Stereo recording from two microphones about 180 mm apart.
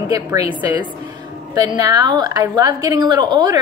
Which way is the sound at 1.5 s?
20° right (ahead or behind).